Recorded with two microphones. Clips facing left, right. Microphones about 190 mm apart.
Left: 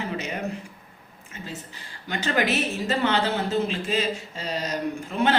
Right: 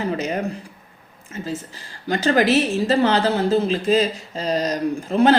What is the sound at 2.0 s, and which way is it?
A man's voice, 35° right (ahead or behind).